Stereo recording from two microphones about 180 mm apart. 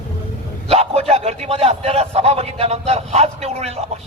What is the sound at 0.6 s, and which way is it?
A man's voice, 35° right (ahead or behind).